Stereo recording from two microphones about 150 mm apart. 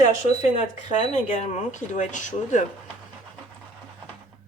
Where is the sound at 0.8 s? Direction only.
50° left (ahead or behind).